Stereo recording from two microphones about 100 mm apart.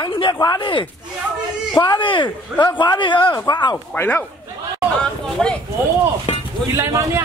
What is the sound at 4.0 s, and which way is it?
Speech, 15° left (ahead or behind).